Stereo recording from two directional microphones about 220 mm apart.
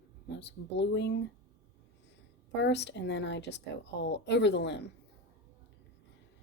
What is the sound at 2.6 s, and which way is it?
Speech, 50° left (ahead or behind).